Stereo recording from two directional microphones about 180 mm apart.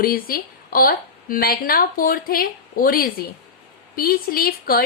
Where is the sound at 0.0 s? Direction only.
55° left (ahead or behind).